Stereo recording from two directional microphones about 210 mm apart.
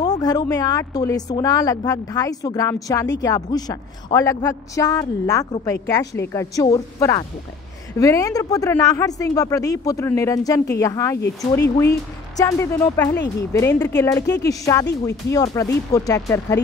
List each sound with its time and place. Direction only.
0.0 s a woman's voice: 20° left (ahead or behind)